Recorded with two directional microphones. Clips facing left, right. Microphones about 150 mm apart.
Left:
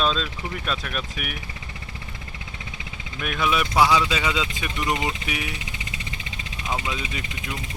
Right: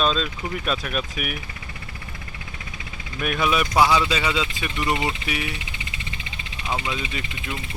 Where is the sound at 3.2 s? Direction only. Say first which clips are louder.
Right 2 dB; 5° right (ahead or behind).